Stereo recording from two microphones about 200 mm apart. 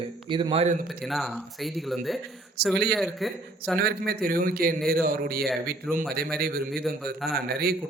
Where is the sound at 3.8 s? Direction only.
50° right (ahead or behind).